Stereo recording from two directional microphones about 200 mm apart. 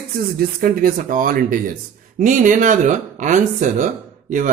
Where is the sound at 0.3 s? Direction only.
45° right (ahead or behind).